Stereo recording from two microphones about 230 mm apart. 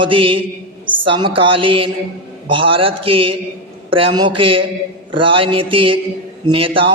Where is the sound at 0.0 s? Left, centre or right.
Right.